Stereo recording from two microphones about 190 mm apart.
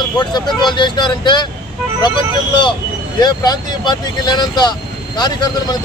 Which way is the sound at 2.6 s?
20° left (ahead or behind).